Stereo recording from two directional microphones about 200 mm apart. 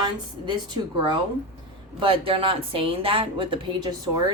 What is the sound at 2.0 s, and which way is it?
Speech, 25° right (ahead or behind).